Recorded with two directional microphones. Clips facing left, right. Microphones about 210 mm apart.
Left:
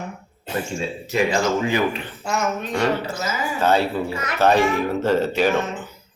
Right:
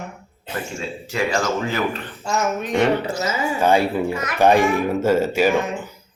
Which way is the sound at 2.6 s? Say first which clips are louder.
Right 3 dB; 15° right (ahead or behind).